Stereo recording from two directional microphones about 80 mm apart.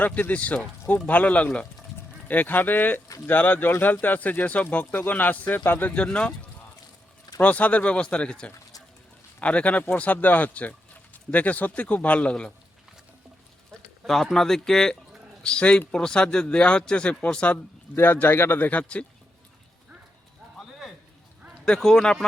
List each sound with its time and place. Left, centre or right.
0.0 s speech: centre
7.3 s speech: centre
14.1 s speech: centre
17.9 s speech: left
20.6 s a sound: centre
21.6 s speech: centre